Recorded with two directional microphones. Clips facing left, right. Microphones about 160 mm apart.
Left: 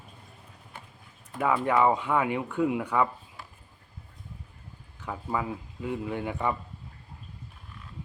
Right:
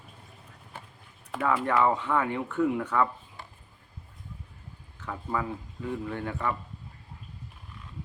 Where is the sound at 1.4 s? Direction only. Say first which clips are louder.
Left 1 dB; 15° left (ahead or behind).